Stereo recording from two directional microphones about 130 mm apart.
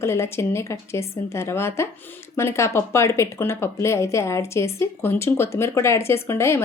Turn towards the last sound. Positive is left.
turn(degrees=20)  # may be behind; listen again after turning